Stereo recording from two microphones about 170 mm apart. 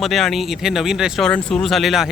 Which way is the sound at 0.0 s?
Centre (ahead or behind).